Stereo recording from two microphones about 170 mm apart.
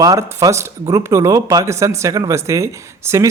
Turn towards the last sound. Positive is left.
turn(degrees=-15)  # may be behind; listen again after turning